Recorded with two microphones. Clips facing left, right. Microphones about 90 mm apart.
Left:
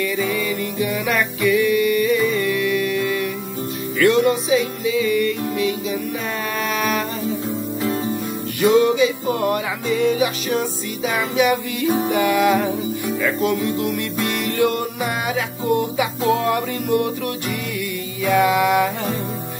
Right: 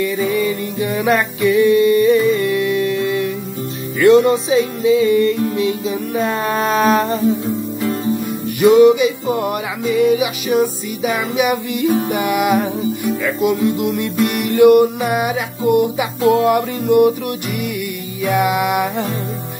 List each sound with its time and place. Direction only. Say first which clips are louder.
0.0 s music: right 4 dB; 25° right (ahead or behind)
8.5 s music: right 6 dB; 20° right (ahead or behind)
9.8 s music: right 4 dB; 5° right (ahead or behind)